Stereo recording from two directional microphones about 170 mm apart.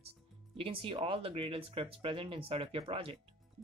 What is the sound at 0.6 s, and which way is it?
Speech, 30° right (ahead or behind).